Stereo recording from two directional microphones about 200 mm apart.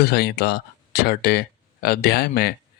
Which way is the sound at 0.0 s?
55° left (ahead or behind).